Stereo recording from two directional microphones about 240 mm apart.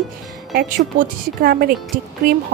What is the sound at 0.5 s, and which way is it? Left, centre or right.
A woman's voice, right.